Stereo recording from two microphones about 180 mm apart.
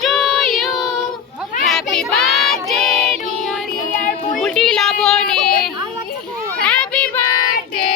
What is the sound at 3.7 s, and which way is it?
Music, 45° left (ahead or behind).